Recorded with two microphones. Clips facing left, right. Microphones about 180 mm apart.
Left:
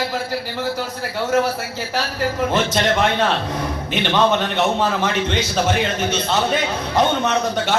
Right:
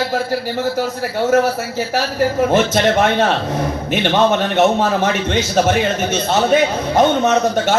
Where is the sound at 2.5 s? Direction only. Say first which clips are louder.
Right 5 dB; 50° right (ahead or behind).